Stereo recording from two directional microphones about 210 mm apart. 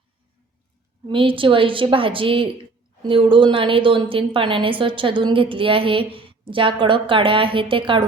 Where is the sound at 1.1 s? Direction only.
25° right (ahead or behind).